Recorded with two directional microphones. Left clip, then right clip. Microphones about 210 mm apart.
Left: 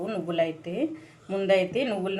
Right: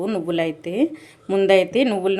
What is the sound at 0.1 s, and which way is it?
Speech, 50° right (ahead or behind).